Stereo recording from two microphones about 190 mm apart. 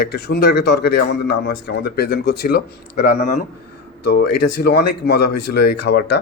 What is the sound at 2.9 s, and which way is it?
Speech, 40° left (ahead or behind).